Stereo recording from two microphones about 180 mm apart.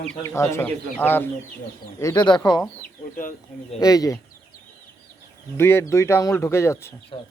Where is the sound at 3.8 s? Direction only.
20° left (ahead or behind).